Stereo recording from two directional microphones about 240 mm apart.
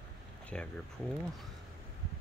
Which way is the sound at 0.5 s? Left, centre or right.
Centre.